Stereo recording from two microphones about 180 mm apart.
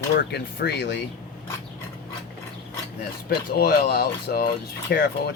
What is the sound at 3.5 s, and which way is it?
Speech, 60° left (ahead or behind).